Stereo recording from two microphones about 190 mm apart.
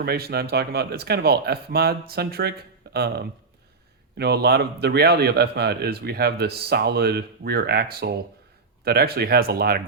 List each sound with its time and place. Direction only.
0.0 s a man's voice: 55° right (ahead or behind)